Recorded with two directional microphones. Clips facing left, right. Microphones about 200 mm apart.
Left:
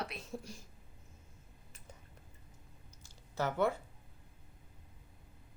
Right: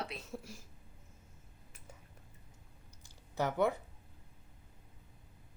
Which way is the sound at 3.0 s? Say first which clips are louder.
Right 1 dB; 15° right (ahead or behind).